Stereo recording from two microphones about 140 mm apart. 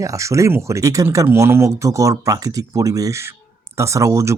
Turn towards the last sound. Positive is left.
turn(degrees=-20)  # may be behind; listen again after turning